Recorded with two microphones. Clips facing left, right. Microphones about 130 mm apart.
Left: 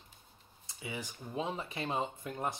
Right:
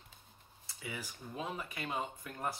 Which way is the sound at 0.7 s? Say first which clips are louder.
Left 3 dB; 20° left (ahead or behind).